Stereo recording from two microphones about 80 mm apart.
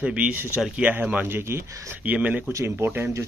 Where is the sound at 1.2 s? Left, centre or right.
Right.